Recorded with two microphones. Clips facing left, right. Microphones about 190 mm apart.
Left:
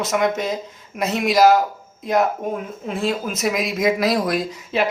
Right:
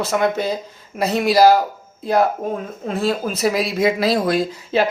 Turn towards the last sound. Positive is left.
turn(degrees=-35)  # may be behind; listen again after turning